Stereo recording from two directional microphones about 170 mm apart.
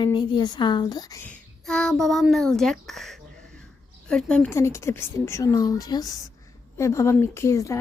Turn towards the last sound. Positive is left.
turn(degrees=20)  # may be behind; listen again after turning